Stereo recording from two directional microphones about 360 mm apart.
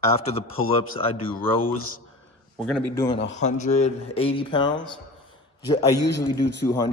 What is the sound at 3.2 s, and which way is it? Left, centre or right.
Speech, left.